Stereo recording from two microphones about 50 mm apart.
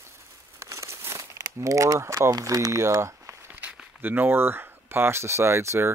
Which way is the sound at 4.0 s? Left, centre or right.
Right.